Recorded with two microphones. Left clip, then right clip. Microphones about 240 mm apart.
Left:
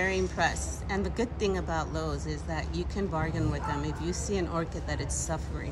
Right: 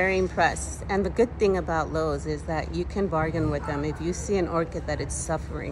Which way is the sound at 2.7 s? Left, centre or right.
Left.